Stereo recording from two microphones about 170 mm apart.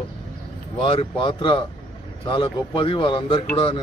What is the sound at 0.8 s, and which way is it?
Speech, 30° left (ahead or behind).